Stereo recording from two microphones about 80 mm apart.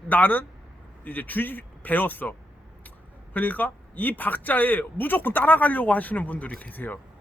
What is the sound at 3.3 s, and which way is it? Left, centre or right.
A man's voice, left.